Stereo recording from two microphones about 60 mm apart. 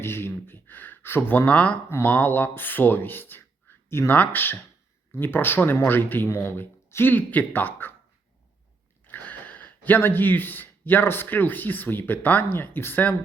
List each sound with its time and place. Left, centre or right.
0.0 s speech: left
1.5 s speech: left
2.0 s speech: left
9.0 s speech: left